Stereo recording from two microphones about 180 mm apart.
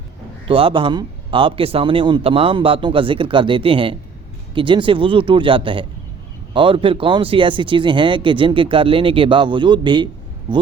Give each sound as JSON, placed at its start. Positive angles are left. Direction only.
{"t": 0.4, "sound": "speech", "side_deg": -30}